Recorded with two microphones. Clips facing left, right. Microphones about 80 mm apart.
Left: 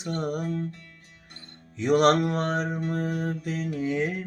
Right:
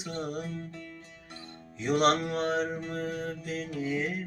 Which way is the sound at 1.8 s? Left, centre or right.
Left.